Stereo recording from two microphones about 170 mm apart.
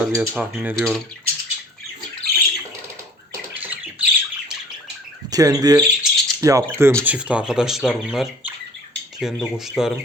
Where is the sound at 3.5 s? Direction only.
10° right (ahead or behind).